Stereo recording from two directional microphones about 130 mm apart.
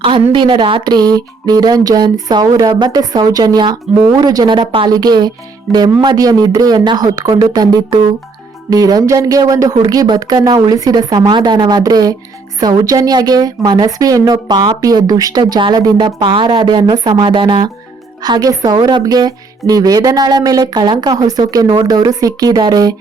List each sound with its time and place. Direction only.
0.0 s a woman's voice: 40° right (ahead or behind)